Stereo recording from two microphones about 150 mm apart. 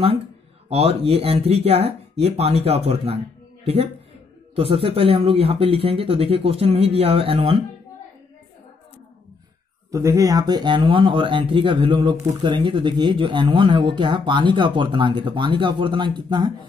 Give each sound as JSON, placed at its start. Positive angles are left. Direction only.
{"t": 0.7, "sound": "speech", "side_deg": -40}
{"t": 9.8, "sound": "speech", "side_deg": -20}